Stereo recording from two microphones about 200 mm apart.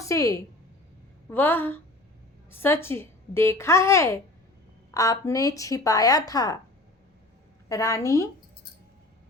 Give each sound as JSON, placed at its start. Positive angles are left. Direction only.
{"t": 0.0, "sound": "a woman's voice", "side_deg": 15}
{"t": 7.7, "sound": "a woman's voice", "side_deg": 15}